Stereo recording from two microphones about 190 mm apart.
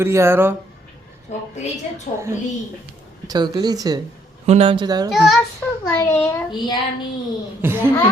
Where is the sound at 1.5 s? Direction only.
35° left (ahead or behind).